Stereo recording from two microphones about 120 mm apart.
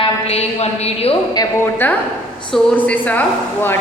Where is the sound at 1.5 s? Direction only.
20° left (ahead or behind).